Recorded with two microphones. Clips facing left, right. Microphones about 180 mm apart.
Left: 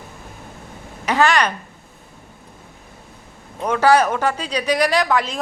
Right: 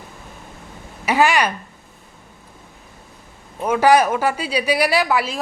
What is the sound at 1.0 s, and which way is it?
Speech, 10° right (ahead or behind).